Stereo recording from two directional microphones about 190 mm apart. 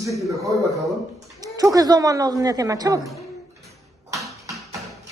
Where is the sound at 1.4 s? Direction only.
20° right (ahead or behind).